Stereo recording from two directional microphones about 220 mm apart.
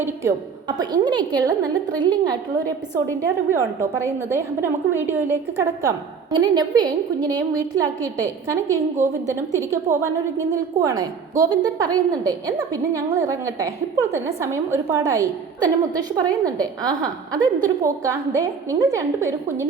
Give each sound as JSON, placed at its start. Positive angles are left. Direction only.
{"t": 0.8, "sound": "a woman's voice", "side_deg": -20}